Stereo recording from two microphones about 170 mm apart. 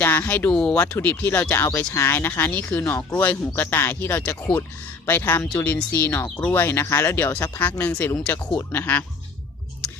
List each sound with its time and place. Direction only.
0.0 s speech: 15° left (ahead or behind)